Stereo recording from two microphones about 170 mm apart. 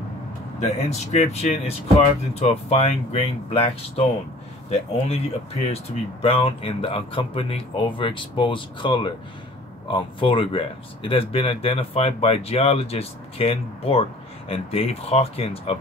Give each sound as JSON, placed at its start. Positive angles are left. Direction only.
{"t": 0.8, "sound": "speech", "side_deg": 40}
{"t": 6.2, "sound": "speech", "side_deg": 35}